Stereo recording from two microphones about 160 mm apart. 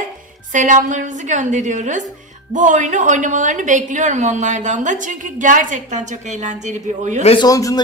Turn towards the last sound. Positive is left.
turn(degrees=20)  # may be behind; listen again after turning